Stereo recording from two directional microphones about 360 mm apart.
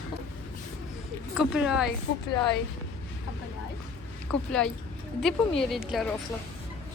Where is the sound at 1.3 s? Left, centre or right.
Centre.